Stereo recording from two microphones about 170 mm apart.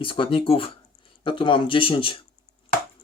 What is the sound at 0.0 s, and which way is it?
Speech, 30° left (ahead or behind).